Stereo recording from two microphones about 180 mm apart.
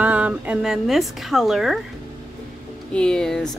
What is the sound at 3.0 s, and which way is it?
Speech, 5° left (ahead or behind).